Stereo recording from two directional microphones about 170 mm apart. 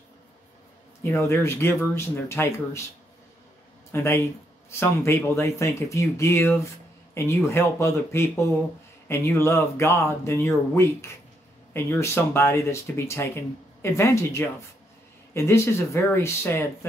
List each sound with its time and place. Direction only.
1.2 s speech: 15° left (ahead or behind)
3.9 s speech: 15° left (ahead or behind)